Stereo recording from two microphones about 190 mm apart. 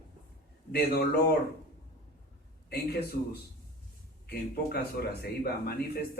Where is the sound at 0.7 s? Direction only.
55° left (ahead or behind).